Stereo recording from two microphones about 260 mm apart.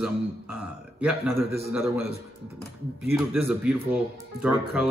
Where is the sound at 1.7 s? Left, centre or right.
Centre.